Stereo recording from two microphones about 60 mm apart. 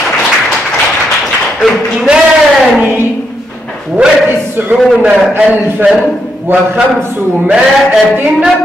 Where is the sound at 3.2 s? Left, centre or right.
Centre.